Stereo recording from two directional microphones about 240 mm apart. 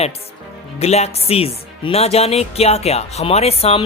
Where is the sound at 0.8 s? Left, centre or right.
Left.